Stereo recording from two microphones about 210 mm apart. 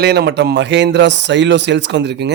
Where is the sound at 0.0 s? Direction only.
50° right (ahead or behind).